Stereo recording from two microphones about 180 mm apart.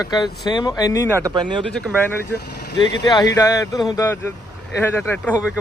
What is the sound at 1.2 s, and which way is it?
Speech, 25° right (ahead or behind).